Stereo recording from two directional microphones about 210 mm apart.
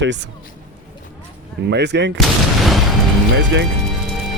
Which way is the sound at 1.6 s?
55° right (ahead or behind).